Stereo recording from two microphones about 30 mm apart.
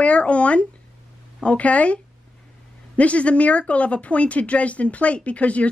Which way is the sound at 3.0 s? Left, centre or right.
Left.